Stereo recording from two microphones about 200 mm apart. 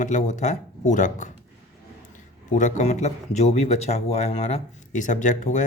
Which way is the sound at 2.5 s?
35° left (ahead or behind).